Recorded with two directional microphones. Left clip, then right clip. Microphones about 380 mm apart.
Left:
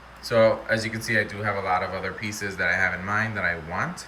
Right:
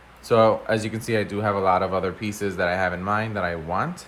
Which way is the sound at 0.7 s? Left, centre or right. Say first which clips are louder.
Even; centre.